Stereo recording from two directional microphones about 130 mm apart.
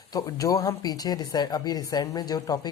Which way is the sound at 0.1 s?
25° left (ahead or behind).